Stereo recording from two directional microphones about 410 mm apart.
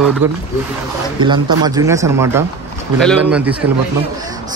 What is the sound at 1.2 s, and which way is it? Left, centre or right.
Speech, centre.